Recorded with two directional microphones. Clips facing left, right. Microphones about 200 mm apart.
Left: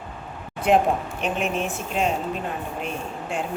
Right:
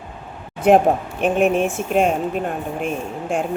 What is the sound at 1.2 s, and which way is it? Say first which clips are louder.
Speech: right 12 dB; 50° right (ahead or behind).